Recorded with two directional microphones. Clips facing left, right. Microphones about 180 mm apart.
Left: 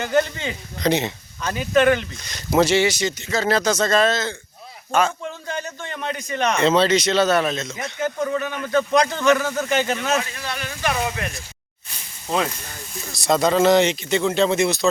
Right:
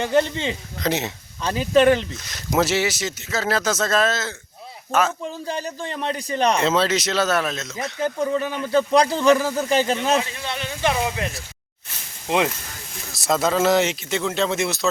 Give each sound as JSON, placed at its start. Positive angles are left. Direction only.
{"t": 0.0, "sound": "speech", "side_deg": -30}
{"t": 0.8, "sound": "speech", "side_deg": -5}
{"t": 1.4, "sound": "a man's voice", "side_deg": -30}
{"t": 2.2, "sound": "speech", "side_deg": -5}
{"t": 5.2, "sound": "a man's voice", "side_deg": -35}
{"t": 6.6, "sound": "speech", "side_deg": -5}
{"t": 7.9, "sound": "a man's voice", "side_deg": -30}
{"t": 13.1, "sound": "speech", "side_deg": -5}